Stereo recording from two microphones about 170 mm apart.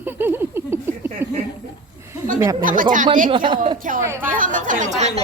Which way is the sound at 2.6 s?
50° right (ahead or behind).